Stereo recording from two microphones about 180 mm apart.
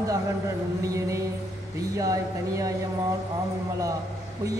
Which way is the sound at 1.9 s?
20° right (ahead or behind).